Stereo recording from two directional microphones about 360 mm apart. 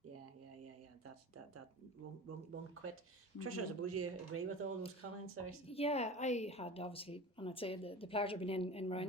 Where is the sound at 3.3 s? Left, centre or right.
Right.